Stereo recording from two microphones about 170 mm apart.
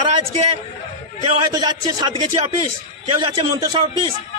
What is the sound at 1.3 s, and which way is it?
Speech, 25° right (ahead or behind).